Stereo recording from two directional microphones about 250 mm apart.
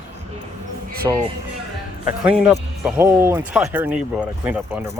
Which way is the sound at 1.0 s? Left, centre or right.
Centre.